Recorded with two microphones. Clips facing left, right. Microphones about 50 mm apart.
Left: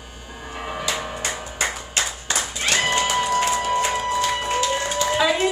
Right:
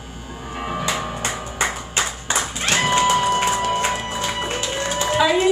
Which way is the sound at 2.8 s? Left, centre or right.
Right.